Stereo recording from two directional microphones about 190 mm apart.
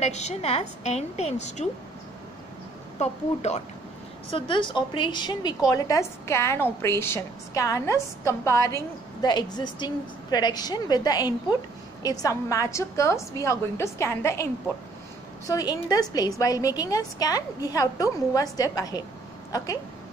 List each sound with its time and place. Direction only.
0.0 s a woman's voice: 35° left (ahead or behind)
3.0 s a woman's voice: 35° left (ahead or behind); by 19.8 s 15° left (ahead or behind)